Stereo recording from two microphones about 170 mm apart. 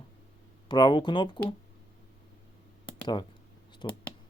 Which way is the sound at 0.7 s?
25° left (ahead or behind).